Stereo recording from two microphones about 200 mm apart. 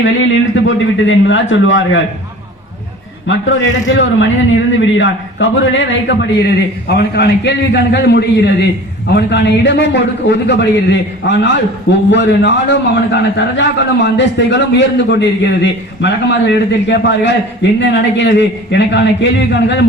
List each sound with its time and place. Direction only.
0.0 s a man's voice: 70° left (ahead or behind)
3.2 s a man's voice: 70° left (ahead or behind)
6.8 s a man's voice: 55° left (ahead or behind)